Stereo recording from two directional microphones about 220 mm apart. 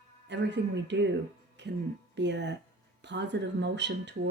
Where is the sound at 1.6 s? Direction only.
50° right (ahead or behind).